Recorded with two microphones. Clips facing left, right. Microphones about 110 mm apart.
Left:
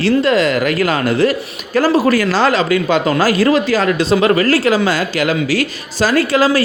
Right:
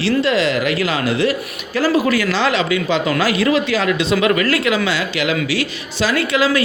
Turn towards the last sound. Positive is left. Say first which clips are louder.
# left 4 dB
turn(degrees=40)  # may be behind; listen again after turning